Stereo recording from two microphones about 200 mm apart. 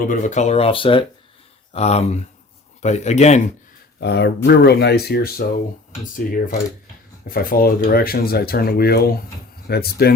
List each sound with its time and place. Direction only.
0.0 s speech: 40° left (ahead or behind)
4.0 s speech: 55° left (ahead or behind)
6.1 s speech: 40° left (ahead or behind)